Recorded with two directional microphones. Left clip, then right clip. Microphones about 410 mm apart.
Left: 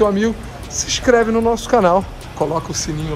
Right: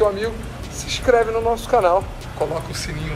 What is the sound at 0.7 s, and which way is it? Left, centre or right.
A woman's voice, left.